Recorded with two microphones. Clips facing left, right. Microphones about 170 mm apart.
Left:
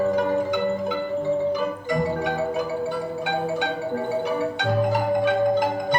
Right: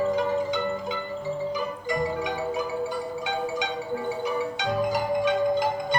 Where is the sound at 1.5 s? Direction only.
55° left (ahead or behind).